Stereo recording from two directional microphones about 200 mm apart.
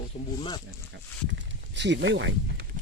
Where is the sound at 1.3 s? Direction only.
60° right (ahead or behind).